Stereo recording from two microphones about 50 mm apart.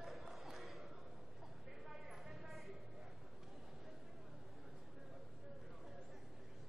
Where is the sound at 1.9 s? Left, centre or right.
Centre.